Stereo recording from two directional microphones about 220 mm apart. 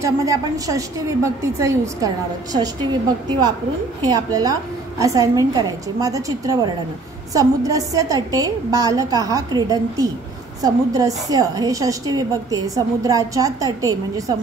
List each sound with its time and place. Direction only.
0.0 s a woman's voice: 15° right (ahead or behind)